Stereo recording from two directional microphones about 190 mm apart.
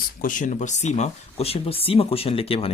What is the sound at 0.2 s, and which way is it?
Speech, 45° left (ahead or behind).